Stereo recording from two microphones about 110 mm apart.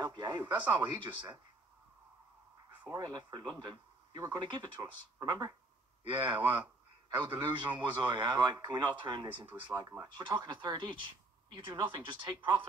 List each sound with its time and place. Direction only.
0.0 s speech: 40° right (ahead or behind)
2.9 s speech: 40° right (ahead or behind)
6.0 s speech: 45° right (ahead or behind)
9.8 s speech: 30° right (ahead or behind)
10.0 s speech: 40° right (ahead or behind)